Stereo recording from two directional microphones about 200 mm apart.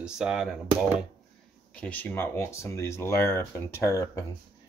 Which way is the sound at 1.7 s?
5° left (ahead or behind).